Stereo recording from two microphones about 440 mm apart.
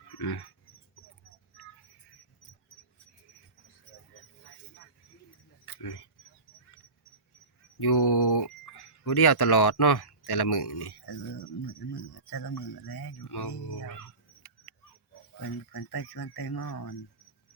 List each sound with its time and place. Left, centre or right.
0.2 s dog: left
7.8 s a sound: left
12.1 s speech: left
15.4 s speech: left